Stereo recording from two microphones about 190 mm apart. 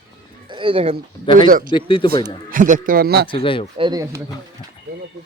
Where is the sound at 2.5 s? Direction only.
45° right (ahead or behind).